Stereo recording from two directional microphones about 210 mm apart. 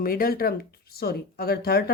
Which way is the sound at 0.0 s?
45° left (ahead or behind).